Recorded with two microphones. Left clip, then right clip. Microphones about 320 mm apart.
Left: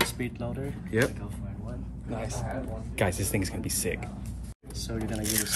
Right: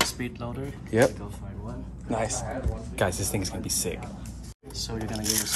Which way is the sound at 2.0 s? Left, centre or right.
Right.